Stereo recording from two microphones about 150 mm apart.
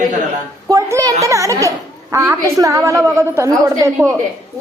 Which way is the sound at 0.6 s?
20° right (ahead or behind).